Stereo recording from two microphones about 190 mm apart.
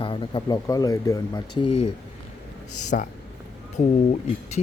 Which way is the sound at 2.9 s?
40° left (ahead or behind).